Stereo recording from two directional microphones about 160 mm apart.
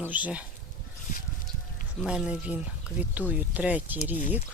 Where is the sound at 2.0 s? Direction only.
5° right (ahead or behind).